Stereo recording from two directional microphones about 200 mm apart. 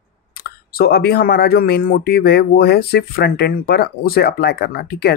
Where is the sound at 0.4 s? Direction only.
50° left (ahead or behind).